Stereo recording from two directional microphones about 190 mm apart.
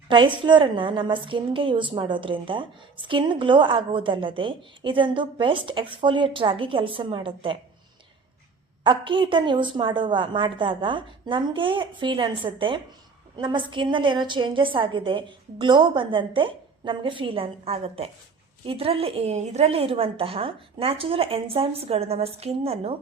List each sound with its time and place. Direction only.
0.1 s a woman's voice: 25° right (ahead or behind)
8.8 s a woman's voice: 25° right (ahead or behind)